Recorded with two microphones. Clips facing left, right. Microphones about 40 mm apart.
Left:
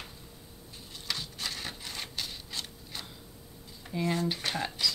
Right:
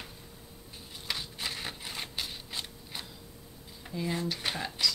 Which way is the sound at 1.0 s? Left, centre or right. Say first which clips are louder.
Even; centre.